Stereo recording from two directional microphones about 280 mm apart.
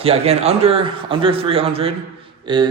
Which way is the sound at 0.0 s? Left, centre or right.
Right.